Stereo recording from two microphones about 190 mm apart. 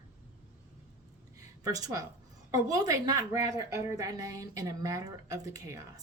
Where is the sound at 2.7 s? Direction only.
20° right (ahead or behind).